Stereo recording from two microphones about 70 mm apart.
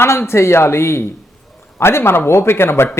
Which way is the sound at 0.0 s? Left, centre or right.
Left.